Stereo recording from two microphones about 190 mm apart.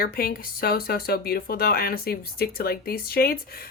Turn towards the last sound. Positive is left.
turn(degrees=55)  # may be behind; listen again after turning